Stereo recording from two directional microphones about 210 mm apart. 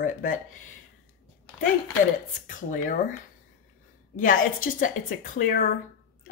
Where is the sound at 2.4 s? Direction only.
40° left (ahead or behind).